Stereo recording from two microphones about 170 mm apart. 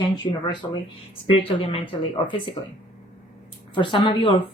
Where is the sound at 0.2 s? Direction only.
25° left (ahead or behind).